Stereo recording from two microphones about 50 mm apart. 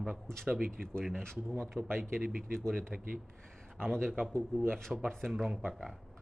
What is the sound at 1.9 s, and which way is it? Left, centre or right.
Speech, right.